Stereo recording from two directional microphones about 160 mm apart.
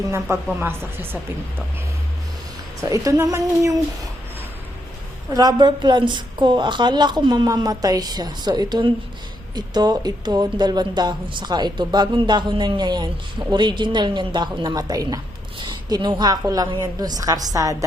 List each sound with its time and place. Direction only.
0.3 s a woman's voice: 20° right (ahead or behind)
2.8 s a woman's voice: 20° right (ahead or behind)
5.3 s a woman's voice: 25° right (ahead or behind)